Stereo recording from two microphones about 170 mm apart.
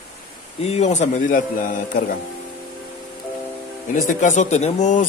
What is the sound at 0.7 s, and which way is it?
Speech, 40° left (ahead or behind).